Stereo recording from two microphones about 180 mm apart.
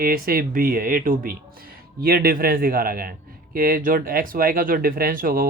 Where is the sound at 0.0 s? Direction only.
55° right (ahead or behind).